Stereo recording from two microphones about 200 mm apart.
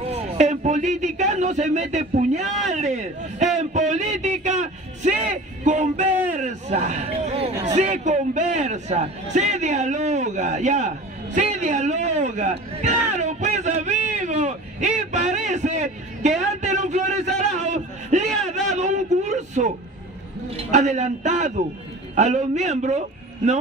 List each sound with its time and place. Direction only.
0.1 s a man's voice: 35° right (ahead or behind)
17.6 s a sound: 35° right (ahead or behind)
20.7 s a man's voice: 35° right (ahead or behind)